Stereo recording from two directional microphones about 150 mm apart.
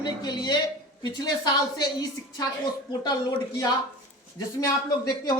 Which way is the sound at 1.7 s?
30° left (ahead or behind).